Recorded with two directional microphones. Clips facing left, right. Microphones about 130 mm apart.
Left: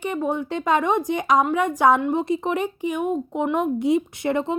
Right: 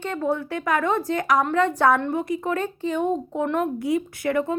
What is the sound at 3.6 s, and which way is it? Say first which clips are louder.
Speech: left 3 dB; 25° left (ahead or behind).